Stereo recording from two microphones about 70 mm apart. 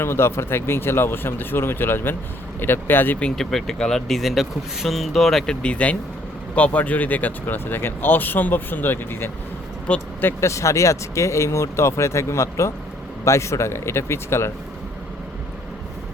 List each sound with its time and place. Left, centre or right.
0.0 s speech: left
3.3 s speech: centre
5.6 s speech: centre
9.9 s speech: centre
10.4 s speech: left